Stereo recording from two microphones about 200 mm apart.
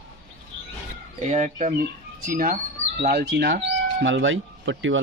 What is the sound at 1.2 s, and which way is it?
Speech, 35° right (ahead or behind).